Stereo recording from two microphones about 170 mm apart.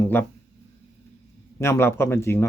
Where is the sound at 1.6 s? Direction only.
15° left (ahead or behind).